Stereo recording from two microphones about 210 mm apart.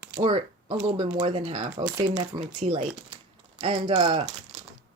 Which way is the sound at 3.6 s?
25° right (ahead or behind).